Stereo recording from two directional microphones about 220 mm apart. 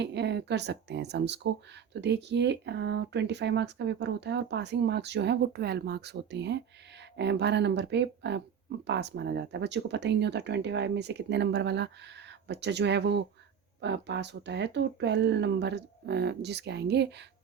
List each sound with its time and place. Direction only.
0.0 s speech: 50° right (ahead or behind)